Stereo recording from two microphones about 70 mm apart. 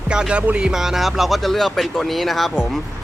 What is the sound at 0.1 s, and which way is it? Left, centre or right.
Speech, centre.